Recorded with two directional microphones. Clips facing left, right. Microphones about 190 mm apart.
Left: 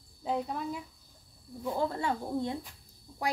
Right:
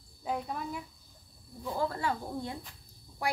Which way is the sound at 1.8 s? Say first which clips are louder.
Even; 20° left (ahead or behind).